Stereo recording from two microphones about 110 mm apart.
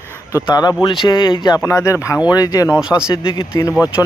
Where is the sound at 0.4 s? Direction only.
40° left (ahead or behind).